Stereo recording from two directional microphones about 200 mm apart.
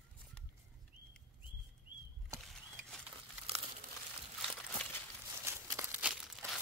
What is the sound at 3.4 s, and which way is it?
Crumpling, 30° right (ahead or behind).